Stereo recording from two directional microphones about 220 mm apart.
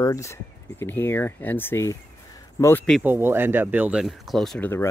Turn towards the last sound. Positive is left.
turn(degrees=10)  # may be behind; listen again after turning